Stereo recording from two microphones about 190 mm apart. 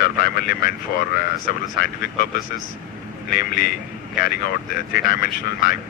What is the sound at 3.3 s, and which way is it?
Speech, 50° left (ahead or behind).